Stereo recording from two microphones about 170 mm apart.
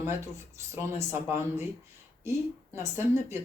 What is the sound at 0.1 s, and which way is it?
Speech, 15° right (ahead or behind).